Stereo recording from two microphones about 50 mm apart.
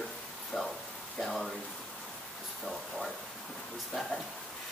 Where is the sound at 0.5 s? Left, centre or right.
Centre.